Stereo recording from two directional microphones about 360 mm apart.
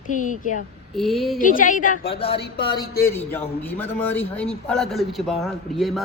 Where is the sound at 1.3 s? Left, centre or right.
Left.